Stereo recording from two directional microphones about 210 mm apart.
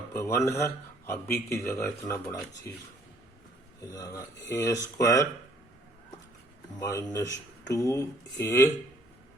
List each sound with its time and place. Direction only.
0.1 s speech: 10° left (ahead or behind)
6.7 s speech: 15° left (ahead or behind)